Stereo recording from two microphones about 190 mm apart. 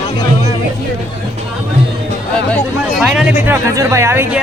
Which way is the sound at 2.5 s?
Centre (ahead or behind).